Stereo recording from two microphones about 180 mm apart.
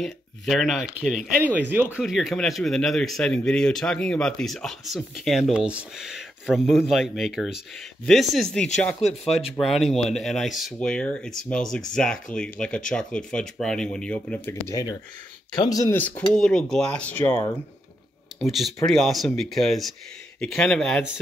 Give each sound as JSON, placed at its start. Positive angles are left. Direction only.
{"t": 0.0, "sound": "speech", "side_deg": 0}
{"t": 16.0, "sound": "speech", "side_deg": 5}